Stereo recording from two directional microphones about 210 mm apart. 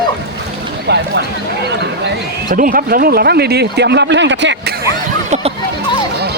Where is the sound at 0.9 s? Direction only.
55° right (ahead or behind).